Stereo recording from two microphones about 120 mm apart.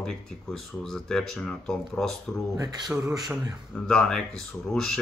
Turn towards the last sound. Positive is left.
turn(degrees=5)  # may be behind; listen again after turning